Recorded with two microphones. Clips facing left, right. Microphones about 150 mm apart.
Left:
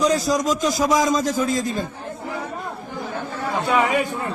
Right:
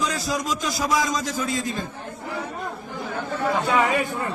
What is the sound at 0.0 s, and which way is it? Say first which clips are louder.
A man's voice: left 7 dB; 40° left (ahead or behind).